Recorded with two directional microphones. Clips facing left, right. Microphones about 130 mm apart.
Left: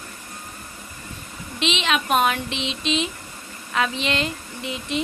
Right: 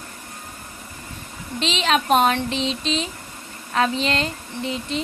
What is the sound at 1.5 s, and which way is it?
A woman's voice, 35° right (ahead or behind).